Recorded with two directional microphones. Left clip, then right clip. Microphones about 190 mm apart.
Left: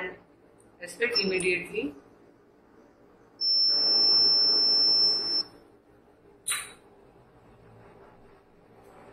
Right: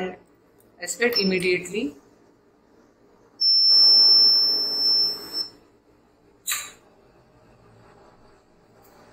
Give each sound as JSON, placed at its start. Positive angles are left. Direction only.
{"t": 0.7, "sound": "speech", "side_deg": -40}
{"t": 1.8, "sound": "speech", "side_deg": 0}
{"t": 3.4, "sound": "smoke detector", "side_deg": 0}